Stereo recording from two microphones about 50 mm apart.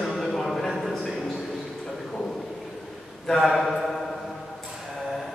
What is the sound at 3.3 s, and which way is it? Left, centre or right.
Speech, centre.